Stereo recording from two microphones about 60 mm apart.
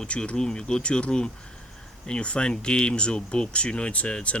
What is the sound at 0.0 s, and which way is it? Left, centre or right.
Speech, centre.